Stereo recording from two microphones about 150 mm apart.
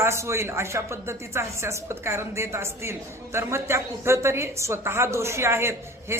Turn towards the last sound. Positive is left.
turn(degrees=-15)  # may be behind; listen again after turning